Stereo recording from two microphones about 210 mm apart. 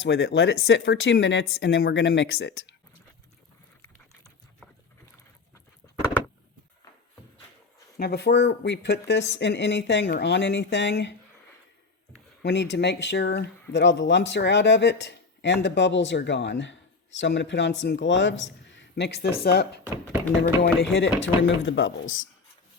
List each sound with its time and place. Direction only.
0.0 s speech: 55° left (ahead or behind)
4.6 s boat: 5° left (ahead or behind)
7.9 s speech: 50° left (ahead or behind)
12.4 s speech: 55° left (ahead or behind)
19.8 s speech: 10° right (ahead or behind)
20.6 s speech: 60° left (ahead or behind)